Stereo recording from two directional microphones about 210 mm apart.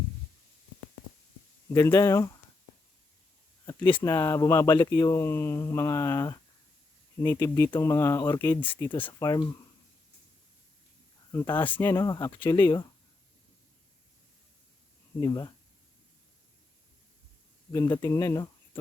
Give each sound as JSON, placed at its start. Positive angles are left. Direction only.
{"t": 1.7, "sound": "speech", "side_deg": 15}
{"t": 3.7, "sound": "a sound", "side_deg": 25}
{"t": 4.0, "sound": "speech", "side_deg": 15}
{"t": 11.3, "sound": "speech", "side_deg": 10}
{"t": 15.2, "sound": "speech", "side_deg": 15}
{"t": 17.7, "sound": "speech", "side_deg": 20}